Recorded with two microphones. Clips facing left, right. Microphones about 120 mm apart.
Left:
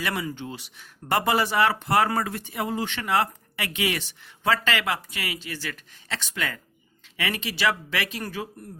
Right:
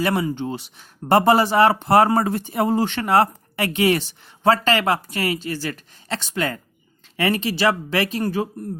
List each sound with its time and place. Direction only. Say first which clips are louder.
0.0 s speech: right 8 dB; 30° right (ahead or behind)